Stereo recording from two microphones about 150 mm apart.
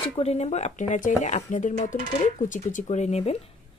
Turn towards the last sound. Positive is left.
turn(degrees=45)  # may be behind; listen again after turning